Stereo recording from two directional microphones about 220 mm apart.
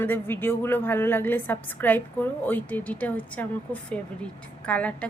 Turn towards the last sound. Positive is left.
turn(degrees=5)  # may be behind; listen again after turning